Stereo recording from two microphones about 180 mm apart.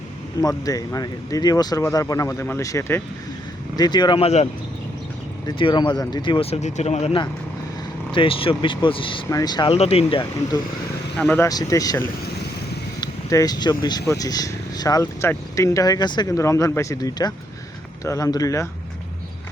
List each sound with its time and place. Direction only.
0.4 s speech: 20° left (ahead or behind); by 4.4 s 35° left (ahead or behind)
5.5 s speech: 25° left (ahead or behind)
9.7 s speech: 35° left (ahead or behind)
11.2 s speech: 10° left (ahead or behind)
11.4 s speech: 20° left (ahead or behind)